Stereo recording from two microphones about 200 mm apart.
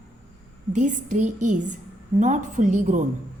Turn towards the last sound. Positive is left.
turn(degrees=-40)  # may be behind; listen again after turning